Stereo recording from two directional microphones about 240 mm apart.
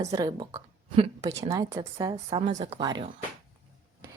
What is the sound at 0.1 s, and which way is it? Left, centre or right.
A woman's voice, centre.